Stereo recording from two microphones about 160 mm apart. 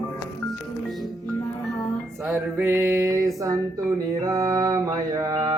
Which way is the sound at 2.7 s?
20° right (ahead or behind).